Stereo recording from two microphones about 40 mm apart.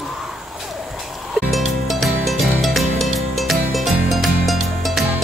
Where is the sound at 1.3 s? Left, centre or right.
Centre.